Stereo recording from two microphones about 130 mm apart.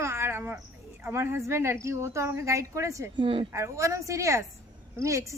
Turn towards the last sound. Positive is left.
turn(degrees=-25)  # may be behind; listen again after turning